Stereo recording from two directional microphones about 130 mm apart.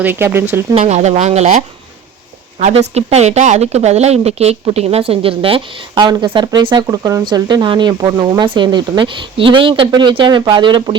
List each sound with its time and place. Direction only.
0.0 s speech: 15° right (ahead or behind)
0.7 s speech: 55° right (ahead or behind); by 10.9 s 35° right (ahead or behind)